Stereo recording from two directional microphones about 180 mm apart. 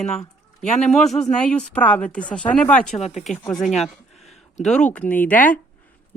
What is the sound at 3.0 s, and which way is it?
Speech, 35° left (ahead or behind).